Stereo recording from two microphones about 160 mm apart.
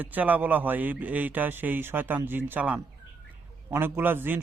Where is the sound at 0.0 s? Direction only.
10° right (ahead or behind).